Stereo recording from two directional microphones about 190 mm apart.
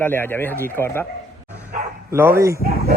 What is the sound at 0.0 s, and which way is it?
Speech, 10° left (ahead or behind).